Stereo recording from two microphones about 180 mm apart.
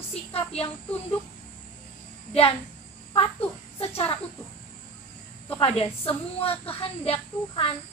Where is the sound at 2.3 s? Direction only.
35° left (ahead or behind).